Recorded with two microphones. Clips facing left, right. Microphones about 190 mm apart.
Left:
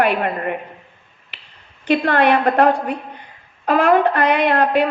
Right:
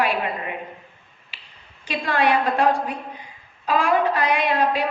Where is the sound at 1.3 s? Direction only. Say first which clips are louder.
Left 3 dB; 60° left (ahead or behind).